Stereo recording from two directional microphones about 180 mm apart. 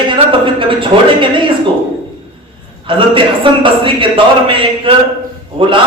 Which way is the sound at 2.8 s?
30° right (ahead or behind).